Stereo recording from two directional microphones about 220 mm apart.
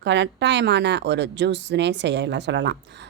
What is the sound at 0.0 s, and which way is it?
A woman's voice, 50° right (ahead or behind).